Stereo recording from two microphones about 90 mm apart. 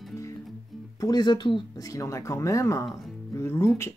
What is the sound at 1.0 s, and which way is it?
Speech, 50° left (ahead or behind).